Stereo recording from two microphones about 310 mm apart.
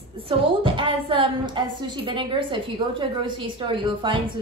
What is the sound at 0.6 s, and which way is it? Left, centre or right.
A woman's voice, centre.